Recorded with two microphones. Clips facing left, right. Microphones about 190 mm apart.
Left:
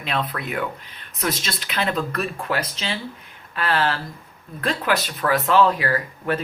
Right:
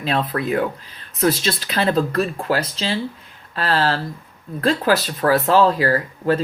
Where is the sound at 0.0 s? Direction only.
35° right (ahead or behind).